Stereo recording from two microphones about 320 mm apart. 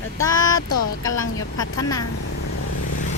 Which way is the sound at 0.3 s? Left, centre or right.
Centre.